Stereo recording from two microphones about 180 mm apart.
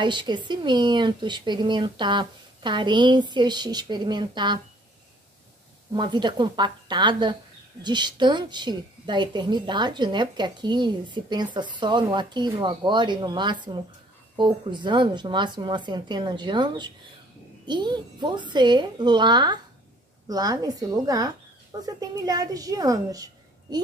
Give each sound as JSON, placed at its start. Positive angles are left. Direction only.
{"t": 0.0, "sound": "a woman's voice", "side_deg": -25}
{"t": 5.9, "sound": "a woman's voice", "side_deg": -25}